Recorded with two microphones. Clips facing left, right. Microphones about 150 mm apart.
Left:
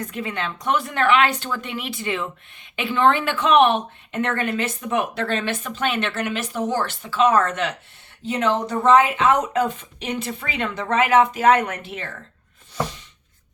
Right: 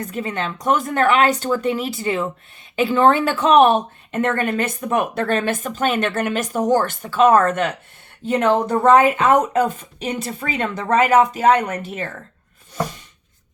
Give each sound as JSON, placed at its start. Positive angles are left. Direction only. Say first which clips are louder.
{"t": 0.1, "sound": "a woman's voice", "louder": "right 3 dB", "side_deg": -40}